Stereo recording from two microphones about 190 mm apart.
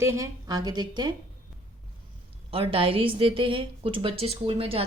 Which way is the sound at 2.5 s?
30° right (ahead or behind).